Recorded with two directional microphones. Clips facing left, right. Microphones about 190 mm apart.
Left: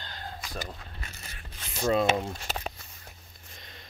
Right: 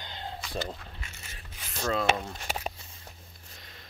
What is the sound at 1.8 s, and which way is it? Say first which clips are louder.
Speech: left 3 dB; 15° left (ahead or behind).